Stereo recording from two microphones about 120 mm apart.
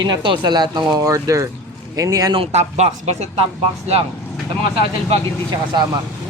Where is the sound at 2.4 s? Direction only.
65° right (ahead or behind).